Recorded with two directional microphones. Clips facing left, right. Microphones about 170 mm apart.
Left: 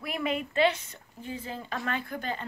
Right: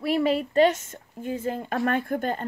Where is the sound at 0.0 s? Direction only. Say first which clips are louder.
Right 8 dB; 35° right (ahead or behind).